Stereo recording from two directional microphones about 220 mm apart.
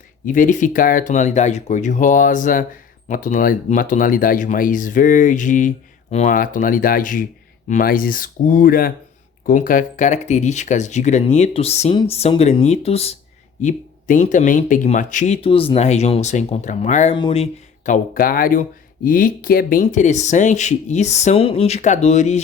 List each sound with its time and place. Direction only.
0.3 s speech: 35° left (ahead or behind)